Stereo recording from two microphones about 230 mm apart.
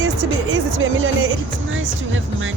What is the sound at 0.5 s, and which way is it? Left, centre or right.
Music, right.